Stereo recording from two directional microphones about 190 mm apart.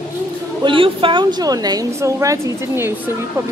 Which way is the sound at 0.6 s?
25° right (ahead or behind).